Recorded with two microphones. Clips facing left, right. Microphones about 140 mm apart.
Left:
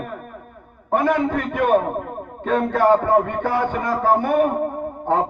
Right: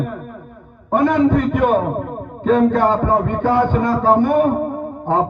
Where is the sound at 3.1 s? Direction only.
20° right (ahead or behind).